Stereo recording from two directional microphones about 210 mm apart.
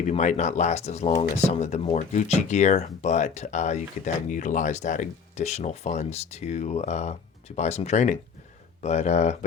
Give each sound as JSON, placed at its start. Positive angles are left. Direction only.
{"t": 0.0, "sound": "speech", "side_deg": 35}